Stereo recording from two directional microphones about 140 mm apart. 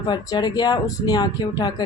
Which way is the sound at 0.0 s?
30° left (ahead or behind).